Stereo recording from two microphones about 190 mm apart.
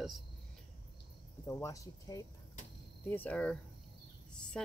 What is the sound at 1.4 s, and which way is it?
Speech, 15° left (ahead or behind).